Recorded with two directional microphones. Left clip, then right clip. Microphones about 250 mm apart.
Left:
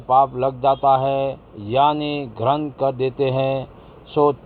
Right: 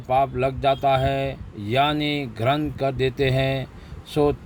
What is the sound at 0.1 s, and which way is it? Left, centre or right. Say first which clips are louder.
Speech: left 5 dB; right.